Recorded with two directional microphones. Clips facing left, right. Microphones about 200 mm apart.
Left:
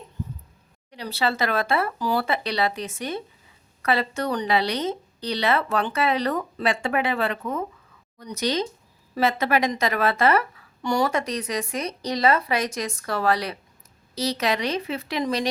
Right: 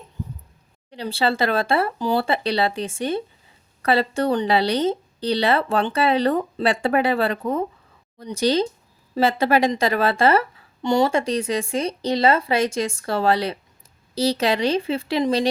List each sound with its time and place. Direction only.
0.9 s a woman's voice: 30° right (ahead or behind)